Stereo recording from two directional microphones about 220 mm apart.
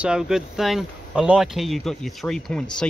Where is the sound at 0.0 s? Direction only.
5° right (ahead or behind).